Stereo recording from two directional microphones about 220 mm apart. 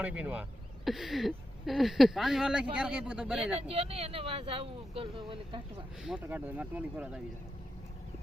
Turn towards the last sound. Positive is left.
turn(degrees=-5)  # may be behind; listen again after turning